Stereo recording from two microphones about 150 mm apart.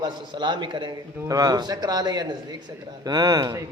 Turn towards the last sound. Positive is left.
turn(degrees=-25)  # may be behind; listen again after turning